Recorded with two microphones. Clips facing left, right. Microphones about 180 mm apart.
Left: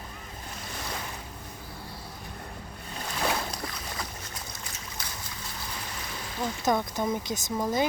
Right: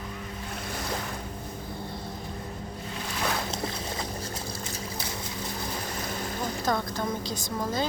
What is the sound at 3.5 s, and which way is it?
Boat, 25° right (ahead or behind).